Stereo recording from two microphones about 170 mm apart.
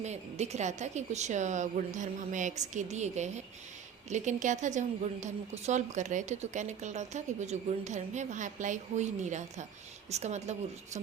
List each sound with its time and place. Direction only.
0.0 s a woman's voice: 40° right (ahead or behind)